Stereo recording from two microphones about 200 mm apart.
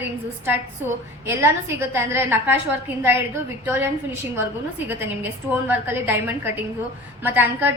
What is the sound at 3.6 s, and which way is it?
A woman's voice, 10° right (ahead or behind).